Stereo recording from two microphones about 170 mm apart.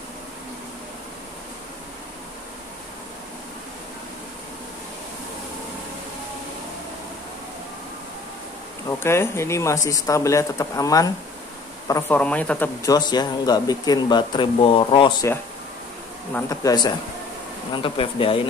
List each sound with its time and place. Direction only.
8.8 s speech: 15° left (ahead or behind); by 15.1 s 30° left (ahead or behind)
16.3 s speech: 20° left (ahead or behind)